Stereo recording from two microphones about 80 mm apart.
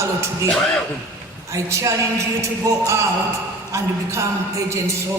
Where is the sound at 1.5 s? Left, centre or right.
Right.